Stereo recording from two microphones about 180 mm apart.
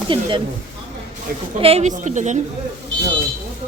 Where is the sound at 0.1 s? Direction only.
25° right (ahead or behind).